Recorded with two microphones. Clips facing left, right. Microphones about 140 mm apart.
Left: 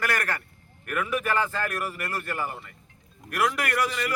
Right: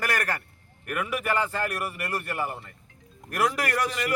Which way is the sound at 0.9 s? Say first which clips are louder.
Left 1 dB; 10° right (ahead or behind).